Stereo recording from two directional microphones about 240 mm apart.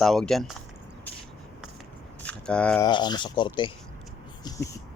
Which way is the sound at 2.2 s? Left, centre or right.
Centre.